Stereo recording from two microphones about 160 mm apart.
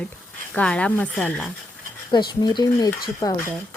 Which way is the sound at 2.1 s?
25° left (ahead or behind).